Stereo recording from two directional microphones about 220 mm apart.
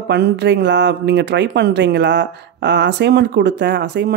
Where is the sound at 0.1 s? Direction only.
50° right (ahead or behind).